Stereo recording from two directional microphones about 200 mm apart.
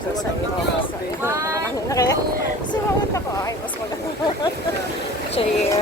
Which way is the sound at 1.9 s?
15° left (ahead or behind).